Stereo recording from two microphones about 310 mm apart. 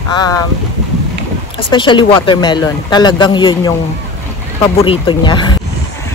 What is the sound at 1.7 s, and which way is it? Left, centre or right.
Speech, centre.